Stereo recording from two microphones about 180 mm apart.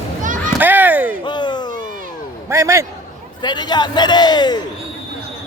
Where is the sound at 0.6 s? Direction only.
10° right (ahead or behind).